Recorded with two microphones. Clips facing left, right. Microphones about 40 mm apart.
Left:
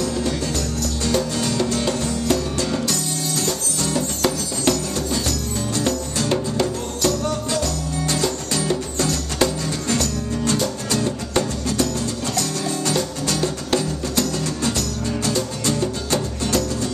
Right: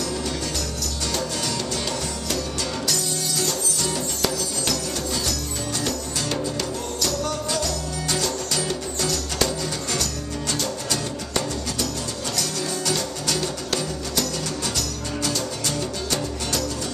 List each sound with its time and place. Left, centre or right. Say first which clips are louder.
1.4 s music: left 6 dB; left
4.2 s music: left 4 dB; left
7.5 s music: left 3 dB; left
13.3 s music: left 4 dB; left